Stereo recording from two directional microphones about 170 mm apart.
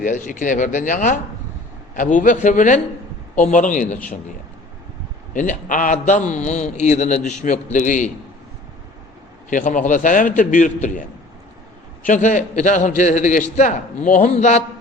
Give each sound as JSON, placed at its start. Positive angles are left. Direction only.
{"t": 0.0, "sound": "a man's voice", "side_deg": 50}
{"t": 5.3, "sound": "a man's voice", "side_deg": 50}
{"t": 9.5, "sound": "a man's voice", "side_deg": 50}
{"t": 12.0, "sound": "a man's voice", "side_deg": 45}